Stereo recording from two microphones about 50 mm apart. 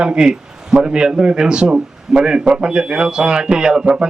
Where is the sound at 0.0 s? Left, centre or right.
Centre.